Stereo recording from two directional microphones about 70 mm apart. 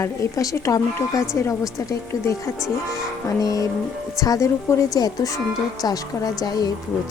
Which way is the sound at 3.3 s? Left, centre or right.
Left.